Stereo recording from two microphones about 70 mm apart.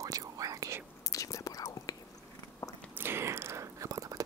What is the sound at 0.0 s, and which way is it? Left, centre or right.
Whispering, right.